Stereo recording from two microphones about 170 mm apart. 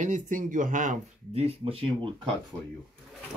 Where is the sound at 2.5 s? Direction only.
20° right (ahead or behind).